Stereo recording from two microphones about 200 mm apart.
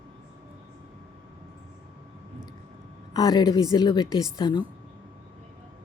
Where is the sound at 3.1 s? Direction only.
20° left (ahead or behind).